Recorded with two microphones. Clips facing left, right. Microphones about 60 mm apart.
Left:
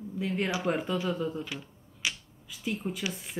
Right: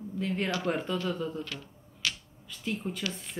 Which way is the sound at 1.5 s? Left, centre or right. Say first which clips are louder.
Left 2 dB; centre.